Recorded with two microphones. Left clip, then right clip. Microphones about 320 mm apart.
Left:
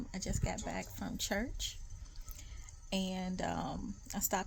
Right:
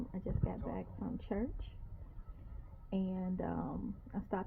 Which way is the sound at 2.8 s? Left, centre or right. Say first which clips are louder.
Left 2 dB; left.